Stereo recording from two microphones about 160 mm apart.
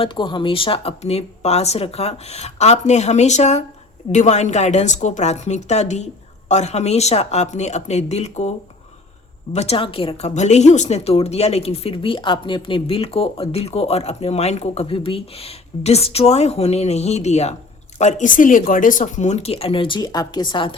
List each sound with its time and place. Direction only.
0.0 s speech: 30° left (ahead or behind)